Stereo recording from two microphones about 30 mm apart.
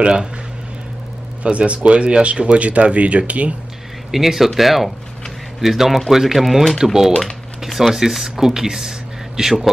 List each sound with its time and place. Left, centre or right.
0.0 s speech: right
1.4 s speech: right
2.4 s speech: right
4.1 s speech: centre
6.8 s speech: centre
7.6 s speech: centre
7.9 s speech: centre